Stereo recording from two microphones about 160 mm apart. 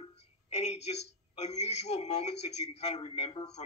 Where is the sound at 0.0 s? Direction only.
45° left (ahead or behind).